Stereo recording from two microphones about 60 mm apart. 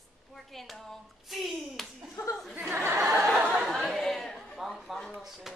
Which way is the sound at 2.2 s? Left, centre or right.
Left.